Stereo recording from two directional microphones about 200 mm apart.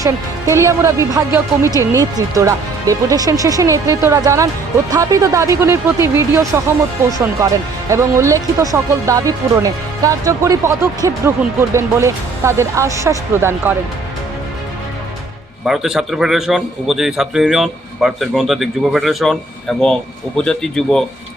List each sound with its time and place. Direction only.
0.0 s speech: 15° right (ahead or behind)
7.9 s speech: 15° right (ahead or behind)
15.6 s a man's voice: centre (ahead or behind)